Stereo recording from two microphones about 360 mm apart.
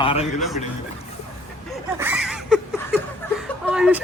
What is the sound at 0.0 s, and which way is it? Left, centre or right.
Speech, centre.